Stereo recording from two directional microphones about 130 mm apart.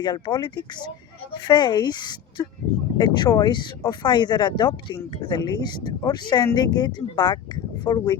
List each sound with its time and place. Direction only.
0.0 s speech: 35° left (ahead or behind)